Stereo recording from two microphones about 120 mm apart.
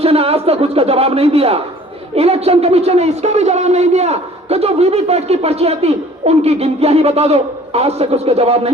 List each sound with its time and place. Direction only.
0.0 s a man's voice: 55° right (ahead or behind)